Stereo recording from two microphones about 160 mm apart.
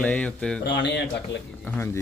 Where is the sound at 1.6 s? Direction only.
15° left (ahead or behind).